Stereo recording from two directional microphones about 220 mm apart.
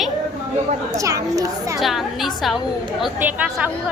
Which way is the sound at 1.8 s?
Centre (ahead or behind).